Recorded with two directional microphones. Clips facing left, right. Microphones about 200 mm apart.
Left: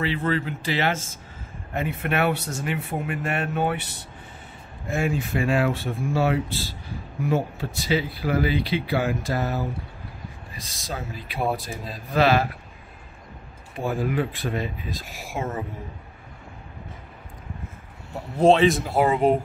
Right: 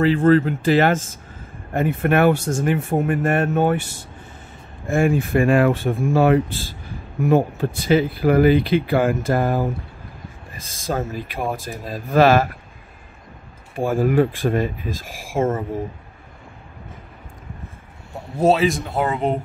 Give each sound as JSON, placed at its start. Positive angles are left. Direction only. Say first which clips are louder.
{"t": 0.0, "sound": "speech", "louder": "right 10 dB", "side_deg": -45}
{"t": 4.8, "sound": "speech", "louder": "right 7 dB", "side_deg": -50}
{"t": 13.7, "sound": "speech", "louder": "right 7 dB", "side_deg": -50}
{"t": 18.4, "sound": "speech", "louder": "even", "side_deg": -5}